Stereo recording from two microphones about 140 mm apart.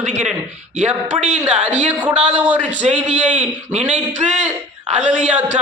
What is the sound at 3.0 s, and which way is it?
Speech, 60° right (ahead or behind).